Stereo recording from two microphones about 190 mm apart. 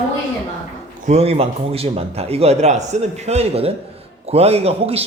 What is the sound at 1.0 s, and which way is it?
A man's voice, 35° right (ahead or behind).